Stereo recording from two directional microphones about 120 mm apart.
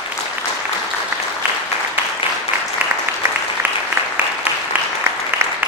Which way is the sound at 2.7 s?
15° right (ahead or behind).